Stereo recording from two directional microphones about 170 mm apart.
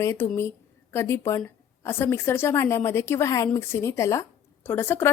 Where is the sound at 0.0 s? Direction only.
15° left (ahead or behind).